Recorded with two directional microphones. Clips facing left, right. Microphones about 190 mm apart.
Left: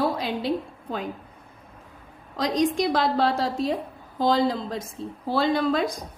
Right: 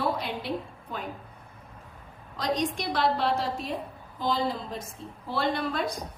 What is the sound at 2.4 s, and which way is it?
A woman's voice, 90° left.